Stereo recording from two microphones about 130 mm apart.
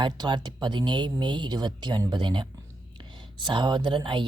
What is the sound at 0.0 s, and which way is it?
Speech, 35° right (ahead or behind).